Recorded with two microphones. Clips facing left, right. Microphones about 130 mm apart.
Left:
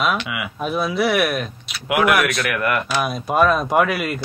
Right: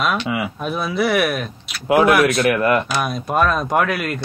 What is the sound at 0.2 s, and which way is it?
Speech, 35° right (ahead or behind).